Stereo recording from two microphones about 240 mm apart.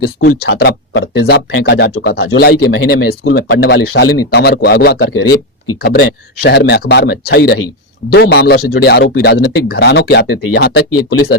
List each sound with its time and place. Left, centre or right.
0.0 s speech: left